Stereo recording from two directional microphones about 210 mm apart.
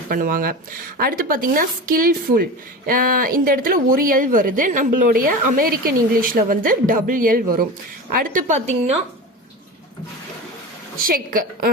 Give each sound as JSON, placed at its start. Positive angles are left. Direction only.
{"t": 0.1, "sound": "a woman's voice", "side_deg": -40}
{"t": 10.9, "sound": "a woman's voice", "side_deg": -40}